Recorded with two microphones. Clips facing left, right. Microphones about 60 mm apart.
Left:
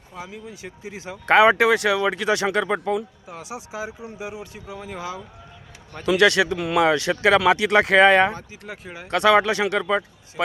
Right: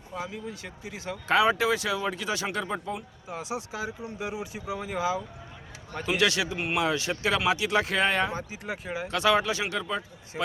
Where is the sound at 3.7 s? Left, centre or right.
Centre.